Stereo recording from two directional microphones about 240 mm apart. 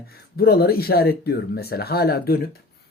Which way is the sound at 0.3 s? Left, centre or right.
Left.